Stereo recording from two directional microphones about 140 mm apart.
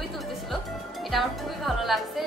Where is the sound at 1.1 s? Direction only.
Centre (ahead or behind).